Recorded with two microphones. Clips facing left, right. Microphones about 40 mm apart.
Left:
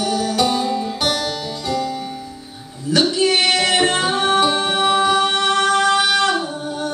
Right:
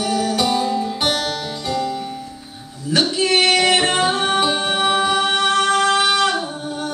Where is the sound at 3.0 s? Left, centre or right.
Centre.